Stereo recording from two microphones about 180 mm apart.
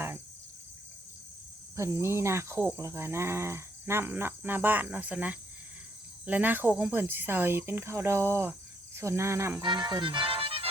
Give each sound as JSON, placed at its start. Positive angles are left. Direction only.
{"t": 1.7, "sound": "speech", "side_deg": -15}
{"t": 9.6, "sound": "speech", "side_deg": -25}